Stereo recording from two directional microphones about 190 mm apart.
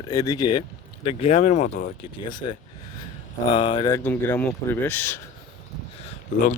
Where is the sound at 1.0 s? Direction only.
30° left (ahead or behind).